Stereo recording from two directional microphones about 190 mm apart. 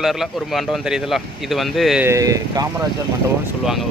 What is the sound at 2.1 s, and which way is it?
Speech, 15° right (ahead or behind).